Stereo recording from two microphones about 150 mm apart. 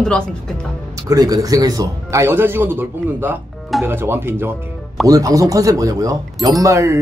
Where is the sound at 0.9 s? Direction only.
25° right (ahead or behind).